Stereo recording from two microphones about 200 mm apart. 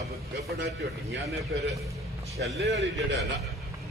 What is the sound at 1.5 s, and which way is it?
Speech, 55° right (ahead or behind).